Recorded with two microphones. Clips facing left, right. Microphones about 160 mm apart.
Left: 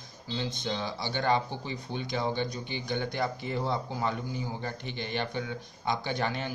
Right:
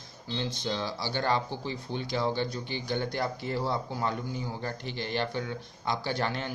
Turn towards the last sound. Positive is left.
turn(degrees=15)  # may be behind; listen again after turning